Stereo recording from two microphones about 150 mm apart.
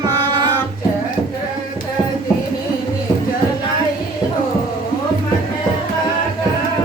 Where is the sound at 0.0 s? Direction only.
25° right (ahead or behind).